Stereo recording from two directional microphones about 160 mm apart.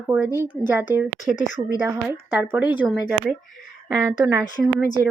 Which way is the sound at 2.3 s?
10° right (ahead or behind).